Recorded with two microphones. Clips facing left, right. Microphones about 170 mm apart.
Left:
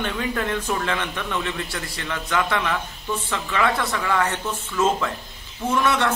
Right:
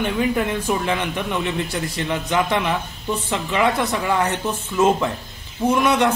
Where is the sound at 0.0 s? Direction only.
15° right (ahead or behind).